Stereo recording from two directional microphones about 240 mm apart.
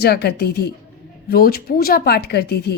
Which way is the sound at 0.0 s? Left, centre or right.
Left.